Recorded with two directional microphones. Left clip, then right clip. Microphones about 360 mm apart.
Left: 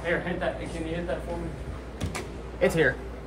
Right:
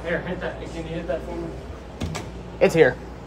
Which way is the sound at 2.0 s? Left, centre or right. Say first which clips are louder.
Right 3 dB; right.